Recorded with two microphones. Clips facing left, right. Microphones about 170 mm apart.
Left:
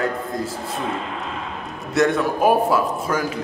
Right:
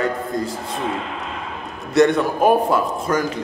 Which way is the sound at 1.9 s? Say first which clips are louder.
Right 3 dB; centre (ahead or behind).